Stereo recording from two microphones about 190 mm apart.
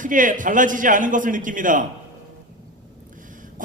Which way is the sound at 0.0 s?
45° right (ahead or behind).